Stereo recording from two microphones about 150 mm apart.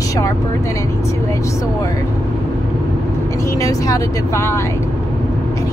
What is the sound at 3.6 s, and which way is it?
Speech, 20° left (ahead or behind).